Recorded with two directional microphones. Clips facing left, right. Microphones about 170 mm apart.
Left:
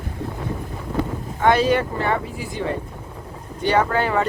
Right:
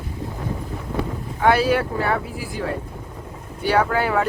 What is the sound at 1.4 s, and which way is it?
Speech, 5° right (ahead or behind).